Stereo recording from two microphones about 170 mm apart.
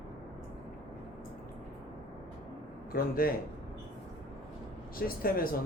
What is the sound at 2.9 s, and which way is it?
Speech, 60° left (ahead or behind).